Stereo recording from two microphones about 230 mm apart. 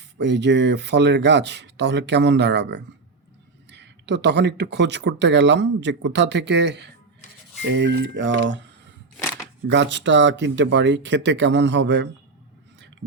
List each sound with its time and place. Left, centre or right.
0.2 s speech: right
9.6 s speech: right